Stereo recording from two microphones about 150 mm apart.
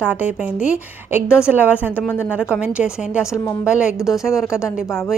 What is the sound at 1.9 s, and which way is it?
Speech, 15° left (ahead or behind).